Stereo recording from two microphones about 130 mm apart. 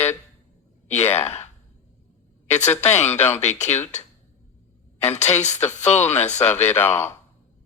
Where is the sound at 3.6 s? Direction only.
60° left (ahead or behind).